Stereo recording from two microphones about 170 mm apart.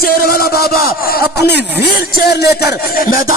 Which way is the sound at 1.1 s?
75° left (ahead or behind).